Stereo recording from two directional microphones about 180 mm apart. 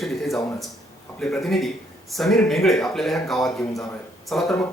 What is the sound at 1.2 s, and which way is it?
A man's voice, centre (ahead or behind).